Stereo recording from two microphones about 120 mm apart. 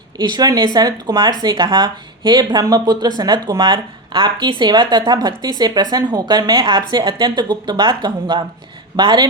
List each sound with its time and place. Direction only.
0.2 s speech: 35° right (ahead or behind)